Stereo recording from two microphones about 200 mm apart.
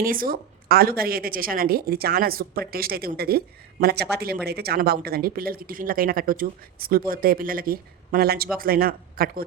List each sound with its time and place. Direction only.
0.0 s a woman's voice: 45° right (ahead or behind)